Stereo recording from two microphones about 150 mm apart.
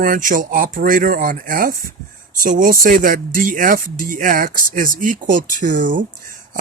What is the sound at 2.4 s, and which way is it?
Speech, 65° right (ahead or behind).